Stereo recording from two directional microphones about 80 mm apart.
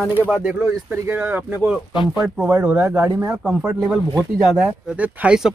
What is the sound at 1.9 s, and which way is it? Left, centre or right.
Speech, left.